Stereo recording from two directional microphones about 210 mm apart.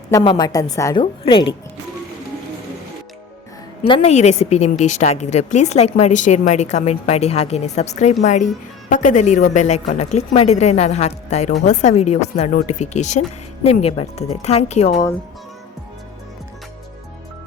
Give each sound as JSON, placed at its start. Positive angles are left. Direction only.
{"t": 0.1, "sound": "a woman's voice", "side_deg": 20}
{"t": 3.8, "sound": "a woman's voice", "side_deg": 30}